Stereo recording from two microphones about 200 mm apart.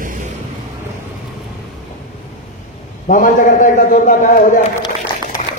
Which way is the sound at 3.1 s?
40° left (ahead or behind).